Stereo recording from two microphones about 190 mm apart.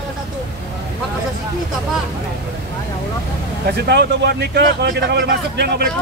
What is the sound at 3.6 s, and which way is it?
A man's voice, 60° right (ahead or behind).